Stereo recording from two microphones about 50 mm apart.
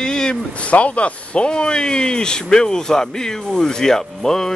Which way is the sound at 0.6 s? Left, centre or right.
Left.